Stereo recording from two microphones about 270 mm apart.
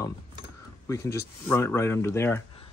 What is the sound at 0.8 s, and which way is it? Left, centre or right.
Speech, centre.